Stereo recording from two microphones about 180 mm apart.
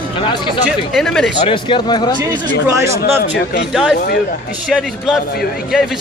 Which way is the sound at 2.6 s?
15° right (ahead or behind).